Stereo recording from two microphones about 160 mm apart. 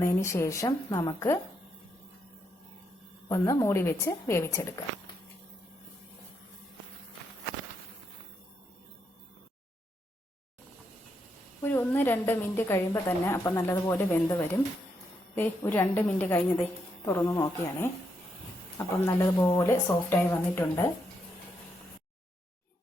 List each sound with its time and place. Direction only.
0.0 s a woman's voice: 15° left (ahead or behind)
3.2 s a woman's voice: 20° left (ahead or behind)
11.6 s a woman's voice: 10° left (ahead or behind)